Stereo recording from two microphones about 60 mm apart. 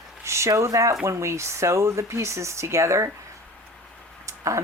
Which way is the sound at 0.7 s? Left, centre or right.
Right.